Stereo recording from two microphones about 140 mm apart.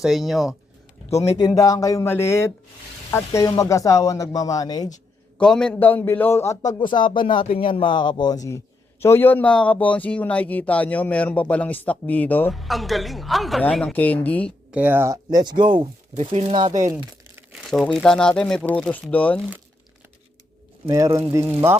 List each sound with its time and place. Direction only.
0.0 s speech: centre (ahead or behind)
1.1 s a man's voice: 25° left (ahead or behind)
5.4 s a man's voice: 5° left (ahead or behind)
12.5 s speech: centre (ahead or behind)
14.7 s speech: 10° right (ahead or behind); by 16.6 s 45° right (ahead or behind)
17.5 s crumpling: centre (ahead or behind)
17.9 s a man's voice: 5° left (ahead or behind)
20.9 s speech: 20° right (ahead or behind)